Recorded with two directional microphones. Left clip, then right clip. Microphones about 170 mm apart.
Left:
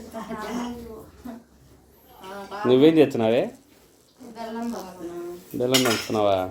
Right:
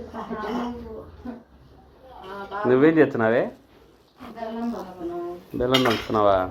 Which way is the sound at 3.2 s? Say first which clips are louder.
Right 1 dB; 25° right (ahead or behind).